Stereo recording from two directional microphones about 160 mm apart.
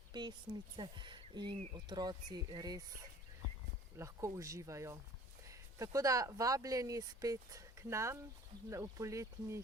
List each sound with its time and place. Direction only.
0.1 s speech: 25° right (ahead or behind)
3.9 s speech: 20° right (ahead or behind)